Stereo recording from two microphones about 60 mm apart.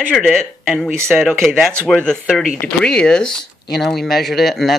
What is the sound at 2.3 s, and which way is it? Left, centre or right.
Speech, centre.